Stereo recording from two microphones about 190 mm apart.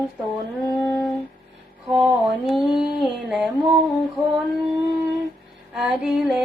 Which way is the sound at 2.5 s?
Centre (ahead or behind).